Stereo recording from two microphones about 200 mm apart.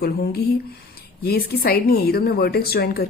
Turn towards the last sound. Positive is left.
turn(degrees=50)  # may be behind; listen again after turning